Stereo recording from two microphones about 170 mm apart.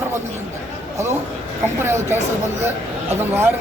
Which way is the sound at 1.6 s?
15° right (ahead or behind).